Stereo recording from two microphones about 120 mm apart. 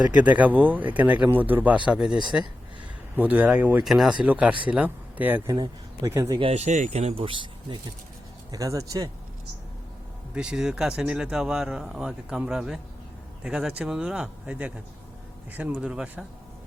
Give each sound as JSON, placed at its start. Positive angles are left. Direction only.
{"t": 0.0, "sound": "speech", "side_deg": -10}
{"t": 5.5, "sound": "speech", "side_deg": -30}
{"t": 6.4, "sound": "speech", "side_deg": -60}
{"t": 7.3, "sound": "speech", "side_deg": -45}
{"t": 8.5, "sound": "speech", "side_deg": -30}
{"t": 10.3, "sound": "speech", "side_deg": -5}